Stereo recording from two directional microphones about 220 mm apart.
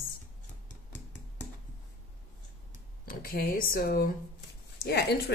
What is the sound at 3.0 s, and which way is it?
A woman's voice, 40° left (ahead or behind).